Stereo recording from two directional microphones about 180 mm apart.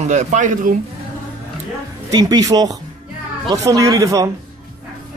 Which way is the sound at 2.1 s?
20° right (ahead or behind).